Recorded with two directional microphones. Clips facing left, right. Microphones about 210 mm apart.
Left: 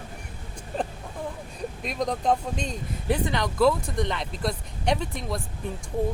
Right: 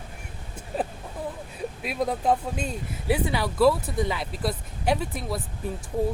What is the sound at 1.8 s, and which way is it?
Speech, 5° right (ahead or behind).